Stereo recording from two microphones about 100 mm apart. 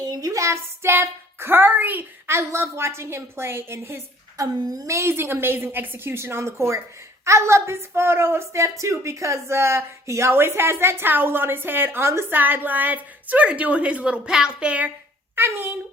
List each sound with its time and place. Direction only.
0.0 s speech: 40° right (ahead or behind); by 14.8 s 10° right (ahead or behind)
15.4 s speech: 20° right (ahead or behind)